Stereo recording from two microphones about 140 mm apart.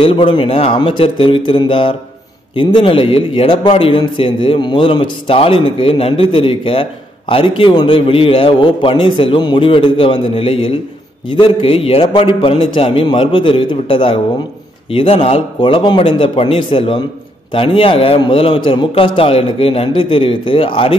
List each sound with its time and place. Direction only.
0.0 s a man's voice: 40° left (ahead or behind)